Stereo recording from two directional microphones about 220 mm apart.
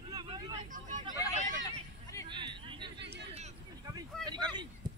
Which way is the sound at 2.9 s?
50° right (ahead or behind).